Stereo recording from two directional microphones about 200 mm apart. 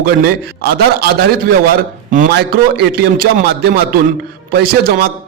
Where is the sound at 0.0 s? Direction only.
50° right (ahead or behind).